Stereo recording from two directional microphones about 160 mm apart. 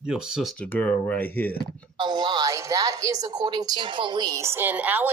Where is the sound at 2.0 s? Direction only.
30° right (ahead or behind).